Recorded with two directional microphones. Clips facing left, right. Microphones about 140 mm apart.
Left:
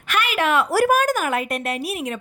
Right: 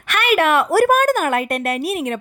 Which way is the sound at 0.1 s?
60° right (ahead or behind).